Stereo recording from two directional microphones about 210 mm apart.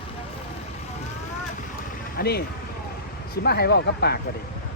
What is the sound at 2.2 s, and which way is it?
Speech, 50° left (ahead or behind).